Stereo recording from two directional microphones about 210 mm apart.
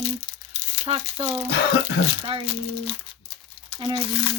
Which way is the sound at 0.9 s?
20° right (ahead or behind).